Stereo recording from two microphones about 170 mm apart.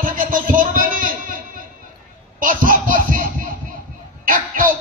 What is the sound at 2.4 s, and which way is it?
Baby laughter, 55° right (ahead or behind).